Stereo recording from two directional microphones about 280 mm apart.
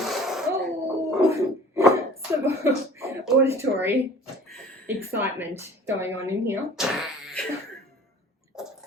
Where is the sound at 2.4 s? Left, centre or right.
Centre.